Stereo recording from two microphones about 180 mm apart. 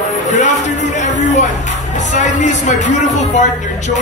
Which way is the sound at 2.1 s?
40° left (ahead or behind).